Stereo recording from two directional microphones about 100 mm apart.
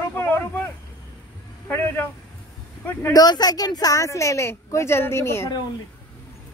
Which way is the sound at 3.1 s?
40° left (ahead or behind).